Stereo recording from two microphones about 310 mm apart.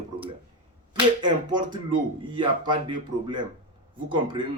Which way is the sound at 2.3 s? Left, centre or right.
Centre.